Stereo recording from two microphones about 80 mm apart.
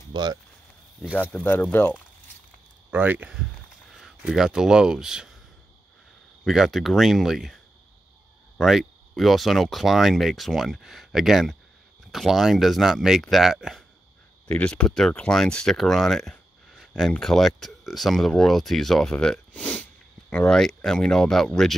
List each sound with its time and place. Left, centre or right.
0.1 s speech: right
1.6 s speech: left
2.9 s speech: right
3.9 s speech: centre
6.4 s speech: centre
14.5 s speech: centre
20.5 s speech: centre